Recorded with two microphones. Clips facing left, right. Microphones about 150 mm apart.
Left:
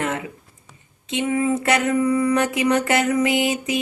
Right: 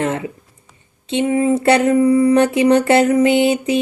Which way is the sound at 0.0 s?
25° right (ahead or behind).